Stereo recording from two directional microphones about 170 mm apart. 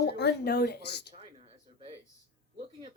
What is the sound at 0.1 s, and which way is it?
Speech, 75° left (ahead or behind).